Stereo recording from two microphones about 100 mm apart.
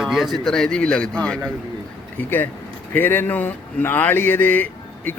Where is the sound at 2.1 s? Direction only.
20° left (ahead or behind).